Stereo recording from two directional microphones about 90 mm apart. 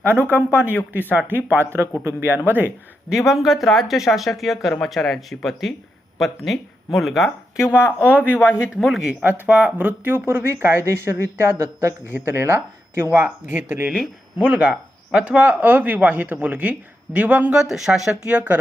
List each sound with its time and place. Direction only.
0.0 s speech: 25° right (ahead or behind)
3.1 s speech: 5° right (ahead or behind)
7.6 s a man's voice: 30° left (ahead or behind)
8.8 s speech: 5° right (ahead or behind)
9.2 s speech: 15° right (ahead or behind)